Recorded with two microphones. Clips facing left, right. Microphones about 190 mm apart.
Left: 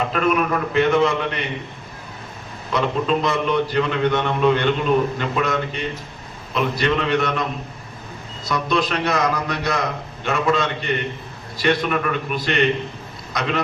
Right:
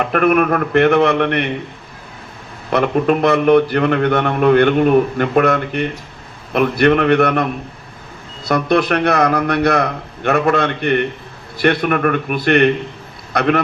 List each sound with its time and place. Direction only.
0.0 s a man's voice: 60° right (ahead or behind)
2.6 s a man's voice: 60° right (ahead or behind)
8.4 s a man's voice: 60° right (ahead or behind)